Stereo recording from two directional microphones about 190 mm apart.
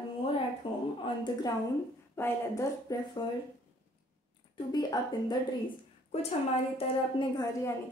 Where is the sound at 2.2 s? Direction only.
15° left (ahead or behind).